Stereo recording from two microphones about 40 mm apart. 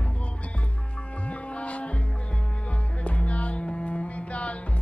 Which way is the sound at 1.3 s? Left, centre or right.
Left.